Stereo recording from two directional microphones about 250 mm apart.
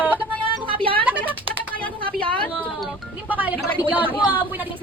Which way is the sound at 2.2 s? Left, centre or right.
Right.